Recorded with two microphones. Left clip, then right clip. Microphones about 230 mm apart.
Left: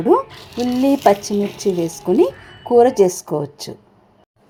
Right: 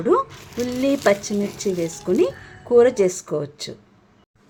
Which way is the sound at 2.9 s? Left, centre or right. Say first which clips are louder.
Left 4 dB; centre.